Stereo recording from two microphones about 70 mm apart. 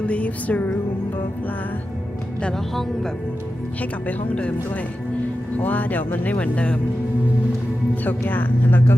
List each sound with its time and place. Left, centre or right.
0.0 s music: centre
2.4 s speech: centre
3.8 s speech: left
8.0 s speech: left